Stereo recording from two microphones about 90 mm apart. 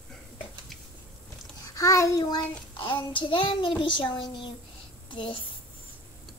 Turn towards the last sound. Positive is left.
turn(degrees=70)  # may be behind; listen again after turning